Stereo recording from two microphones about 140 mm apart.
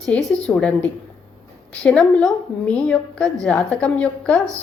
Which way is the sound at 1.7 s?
5° left (ahead or behind).